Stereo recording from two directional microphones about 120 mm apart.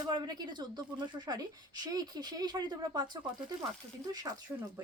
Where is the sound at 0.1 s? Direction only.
35° right (ahead or behind).